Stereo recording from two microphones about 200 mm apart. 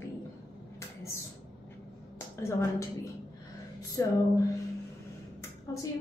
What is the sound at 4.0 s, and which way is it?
Speech, 15° left (ahead or behind).